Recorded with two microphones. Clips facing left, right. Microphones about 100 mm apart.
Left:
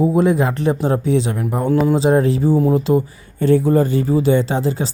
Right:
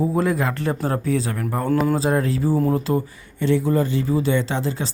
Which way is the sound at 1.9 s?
25° left (ahead or behind).